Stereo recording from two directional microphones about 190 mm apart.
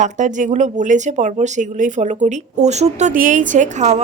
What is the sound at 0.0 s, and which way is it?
Speech, 40° right (ahead or behind).